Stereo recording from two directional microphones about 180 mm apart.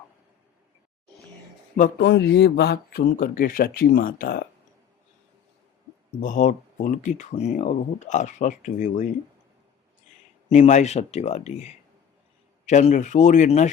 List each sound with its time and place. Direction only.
2.0 s speech: 70° left (ahead or behind); by 4.4 s 55° left (ahead or behind)
6.1 s speech: 45° left (ahead or behind)
10.5 s speech: 40° left (ahead or behind)